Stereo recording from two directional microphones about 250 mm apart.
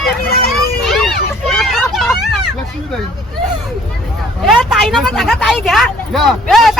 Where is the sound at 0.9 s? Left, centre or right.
Centre.